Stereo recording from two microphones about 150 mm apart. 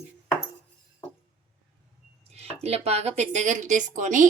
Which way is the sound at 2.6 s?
45° right (ahead or behind).